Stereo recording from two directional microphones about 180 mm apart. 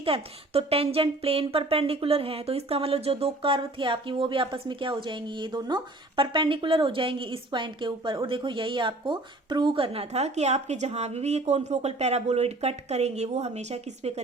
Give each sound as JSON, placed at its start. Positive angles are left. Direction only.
{"t": 0.0, "sound": "speech", "side_deg": -30}